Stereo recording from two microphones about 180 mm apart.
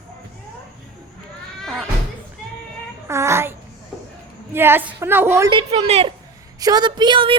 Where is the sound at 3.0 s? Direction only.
15° right (ahead or behind).